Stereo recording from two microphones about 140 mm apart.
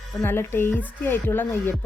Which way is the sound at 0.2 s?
15° left (ahead or behind).